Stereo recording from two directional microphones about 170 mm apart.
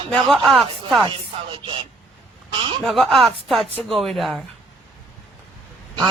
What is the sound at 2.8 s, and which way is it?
Speech, centre (ahead or behind).